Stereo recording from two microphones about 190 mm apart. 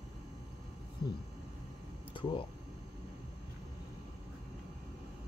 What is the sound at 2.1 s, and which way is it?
Speech, 25° left (ahead or behind).